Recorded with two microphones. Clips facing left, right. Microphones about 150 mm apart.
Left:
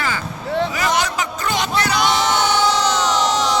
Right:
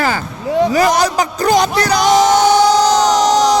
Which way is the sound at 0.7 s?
40° right (ahead or behind).